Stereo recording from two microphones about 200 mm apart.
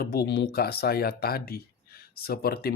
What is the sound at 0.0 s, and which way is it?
Speech, 50° left (ahead or behind).